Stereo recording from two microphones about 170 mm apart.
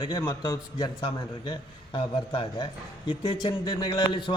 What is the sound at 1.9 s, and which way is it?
A man's voice, 30° left (ahead or behind).